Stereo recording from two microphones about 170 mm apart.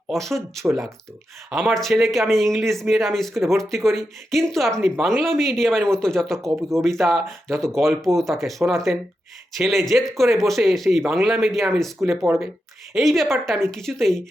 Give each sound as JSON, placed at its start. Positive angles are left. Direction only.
{"t": 0.1, "sound": "speech", "side_deg": 0}
{"t": 1.5, "sound": "speech", "side_deg": 0}
{"t": 6.4, "sound": "speech", "side_deg": -15}
{"t": 6.8, "sound": "speech", "side_deg": 0}